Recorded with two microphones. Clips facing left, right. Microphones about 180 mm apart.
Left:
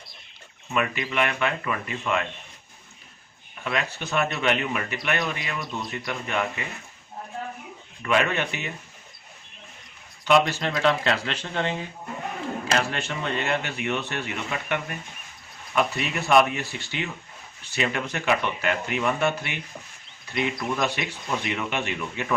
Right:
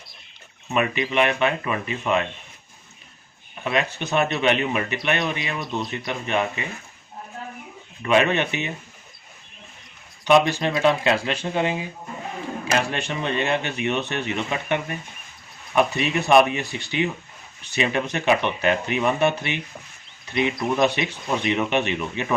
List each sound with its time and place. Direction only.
0.7 s speech: 20° right (ahead or behind)
3.6 s speech: 20° right (ahead or behind)
8.0 s speech: 20° right (ahead or behind)
10.2 s speech: 20° right (ahead or behind)
12.9 s speech: 20° right (ahead or behind)